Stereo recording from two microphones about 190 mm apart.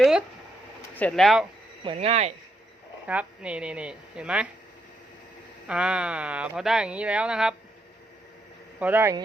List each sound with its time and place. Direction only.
0.0 s a sound: 5° right (ahead or behind)
0.9 s speech: 5° left (ahead or behind)
1.8 s speech: 30° right (ahead or behind)
3.1 s speech: 5° right (ahead or behind)
5.6 s speech: 5° right (ahead or behind)
8.8 s speech: 10° right (ahead or behind)